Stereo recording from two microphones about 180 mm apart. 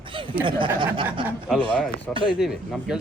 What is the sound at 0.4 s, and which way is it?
Speech, 25° right (ahead or behind).